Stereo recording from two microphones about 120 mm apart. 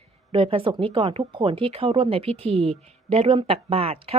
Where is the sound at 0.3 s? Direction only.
50° right (ahead or behind).